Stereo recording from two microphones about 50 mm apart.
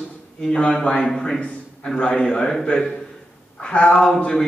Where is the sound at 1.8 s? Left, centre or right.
Centre.